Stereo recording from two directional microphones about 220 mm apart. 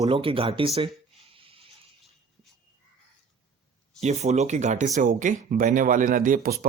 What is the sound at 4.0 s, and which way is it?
Speech, 30° right (ahead or behind).